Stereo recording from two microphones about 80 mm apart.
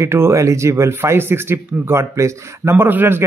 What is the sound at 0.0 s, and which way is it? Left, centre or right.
Speech, right.